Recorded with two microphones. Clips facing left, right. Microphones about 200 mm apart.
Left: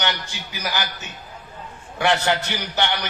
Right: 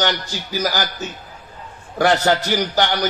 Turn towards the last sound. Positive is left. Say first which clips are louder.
# right 6 dB
turn(degrees=-35)  # may be behind; listen again after turning